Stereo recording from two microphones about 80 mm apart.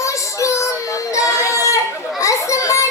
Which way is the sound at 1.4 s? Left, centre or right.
Left.